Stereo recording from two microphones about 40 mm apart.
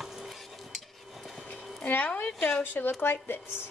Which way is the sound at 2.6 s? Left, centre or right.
Left.